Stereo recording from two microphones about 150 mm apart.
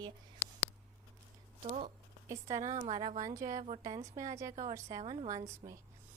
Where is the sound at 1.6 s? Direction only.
50° right (ahead or behind).